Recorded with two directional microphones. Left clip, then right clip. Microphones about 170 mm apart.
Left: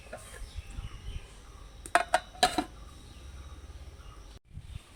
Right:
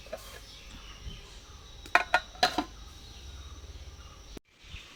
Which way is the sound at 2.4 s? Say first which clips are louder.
Left 2 dB; 10° left (ahead or behind).